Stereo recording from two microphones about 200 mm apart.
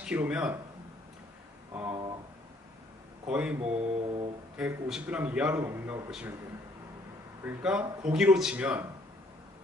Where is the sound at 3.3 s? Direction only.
5° right (ahead or behind).